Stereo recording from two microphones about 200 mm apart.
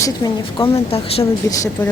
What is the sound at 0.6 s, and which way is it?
Speech, 30° left (ahead or behind).